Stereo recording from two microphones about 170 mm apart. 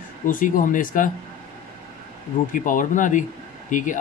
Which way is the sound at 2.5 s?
50° left (ahead or behind).